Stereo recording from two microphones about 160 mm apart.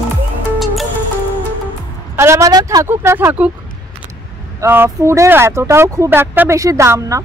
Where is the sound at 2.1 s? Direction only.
20° right (ahead or behind).